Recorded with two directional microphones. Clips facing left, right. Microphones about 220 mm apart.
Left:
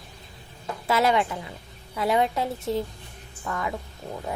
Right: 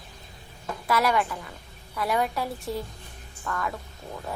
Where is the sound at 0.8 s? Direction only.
25° left (ahead or behind).